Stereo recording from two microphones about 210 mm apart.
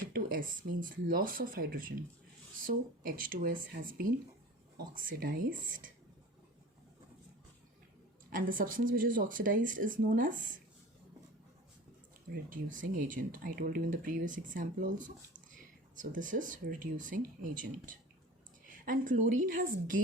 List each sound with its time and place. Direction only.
0.1 s speech: 40° right (ahead or behind)
8.3 s speech: 40° right (ahead or behind)
12.3 s speech: 40° right (ahead or behind)